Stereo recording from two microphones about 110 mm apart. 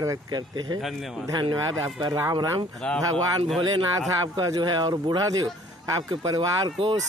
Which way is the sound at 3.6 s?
45° right (ahead or behind).